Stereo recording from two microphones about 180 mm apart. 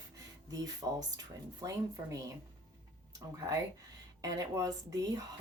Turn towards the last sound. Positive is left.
turn(degrees=-20)  # may be behind; listen again after turning